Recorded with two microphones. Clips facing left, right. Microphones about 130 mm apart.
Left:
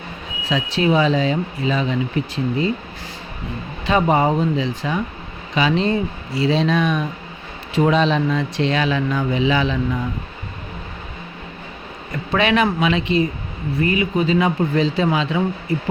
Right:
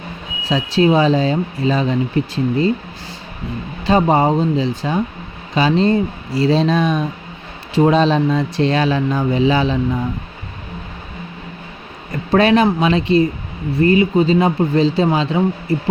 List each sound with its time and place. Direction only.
0.5 s speech: 35° right (ahead or behind)
4.1 s speech: 30° right (ahead or behind)
12.3 s speech: 35° right (ahead or behind)